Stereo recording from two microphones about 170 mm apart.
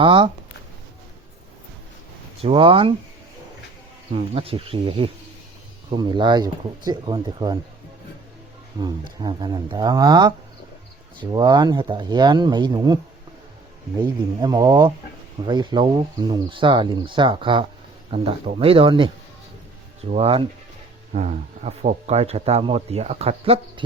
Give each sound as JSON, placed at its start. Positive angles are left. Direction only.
{"t": 0.0, "sound": "speech", "side_deg": -30}
{"t": 2.4, "sound": "speech", "side_deg": -35}
{"t": 4.1, "sound": "speech", "side_deg": -35}
{"t": 9.2, "sound": "speech", "side_deg": -25}
{"t": 14.0, "sound": "speech", "side_deg": -25}
{"t": 21.1, "sound": "speech", "side_deg": -45}